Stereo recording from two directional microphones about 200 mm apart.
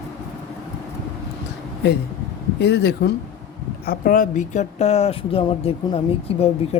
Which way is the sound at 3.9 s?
45° left (ahead or behind).